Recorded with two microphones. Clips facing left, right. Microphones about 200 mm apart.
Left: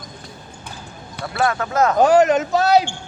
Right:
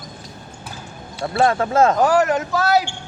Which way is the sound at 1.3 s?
30° right (ahead or behind).